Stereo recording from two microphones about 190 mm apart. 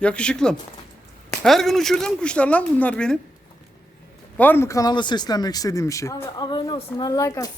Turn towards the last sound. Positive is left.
turn(degrees=20)  # may be behind; listen again after turning